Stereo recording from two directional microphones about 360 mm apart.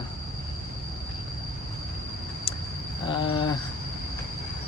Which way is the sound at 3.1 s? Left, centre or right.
Centre.